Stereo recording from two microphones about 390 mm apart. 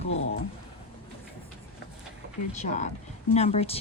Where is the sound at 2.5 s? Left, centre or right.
Centre.